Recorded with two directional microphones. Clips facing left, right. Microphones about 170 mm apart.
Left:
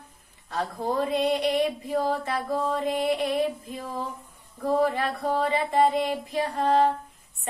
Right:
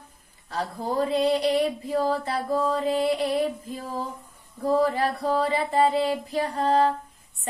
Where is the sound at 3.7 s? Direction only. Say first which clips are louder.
Right 1 dB; 35° right (ahead or behind).